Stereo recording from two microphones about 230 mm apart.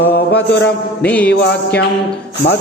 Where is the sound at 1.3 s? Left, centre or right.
Left.